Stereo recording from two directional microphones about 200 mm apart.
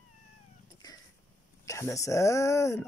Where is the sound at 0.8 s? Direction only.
20° left (ahead or behind).